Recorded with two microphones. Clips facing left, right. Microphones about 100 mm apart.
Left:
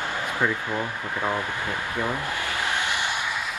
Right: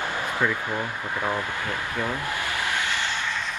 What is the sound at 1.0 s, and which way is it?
Speech, 20° right (ahead or behind).